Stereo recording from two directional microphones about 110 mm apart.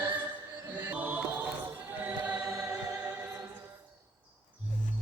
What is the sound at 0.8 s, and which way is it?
Chant, 15° right (ahead or behind).